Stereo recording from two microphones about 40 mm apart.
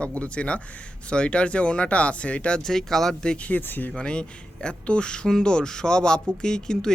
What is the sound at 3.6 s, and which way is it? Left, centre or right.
Speech, left.